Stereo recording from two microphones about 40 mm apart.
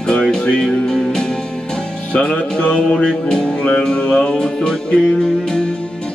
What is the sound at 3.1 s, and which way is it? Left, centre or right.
Music, left.